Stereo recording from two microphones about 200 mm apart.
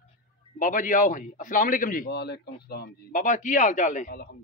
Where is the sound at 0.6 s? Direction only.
40° left (ahead or behind).